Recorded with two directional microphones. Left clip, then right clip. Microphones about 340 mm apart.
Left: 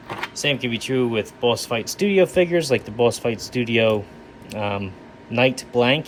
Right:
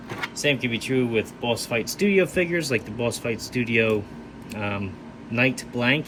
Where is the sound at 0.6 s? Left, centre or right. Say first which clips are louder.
Left 2 dB; centre.